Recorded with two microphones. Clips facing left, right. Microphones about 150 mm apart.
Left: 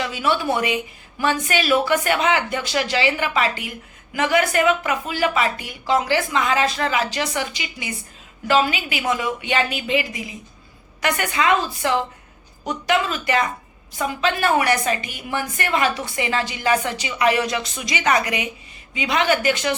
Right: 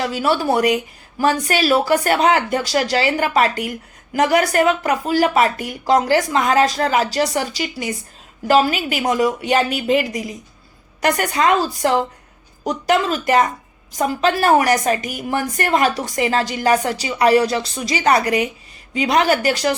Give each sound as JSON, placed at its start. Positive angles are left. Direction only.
{"t": 0.0, "sound": "a woman's voice", "side_deg": -40}